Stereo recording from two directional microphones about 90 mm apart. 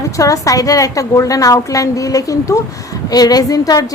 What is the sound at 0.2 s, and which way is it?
A woman's voice, 40° left (ahead or behind).